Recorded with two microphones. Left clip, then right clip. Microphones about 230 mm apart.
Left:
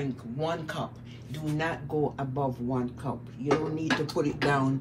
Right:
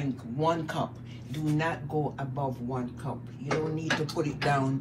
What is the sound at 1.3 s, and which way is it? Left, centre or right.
Speech, centre.